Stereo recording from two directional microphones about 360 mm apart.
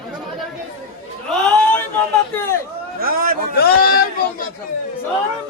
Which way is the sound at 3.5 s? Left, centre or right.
Left.